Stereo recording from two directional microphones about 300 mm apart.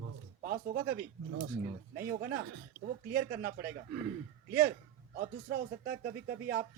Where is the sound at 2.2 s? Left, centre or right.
Right.